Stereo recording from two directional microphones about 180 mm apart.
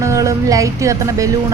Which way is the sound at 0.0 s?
15° right (ahead or behind).